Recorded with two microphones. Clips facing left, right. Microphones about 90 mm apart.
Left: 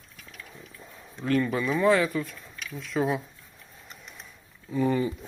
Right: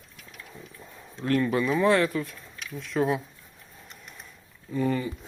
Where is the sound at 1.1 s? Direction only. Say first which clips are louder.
Right 1 dB; centre (ahead or behind).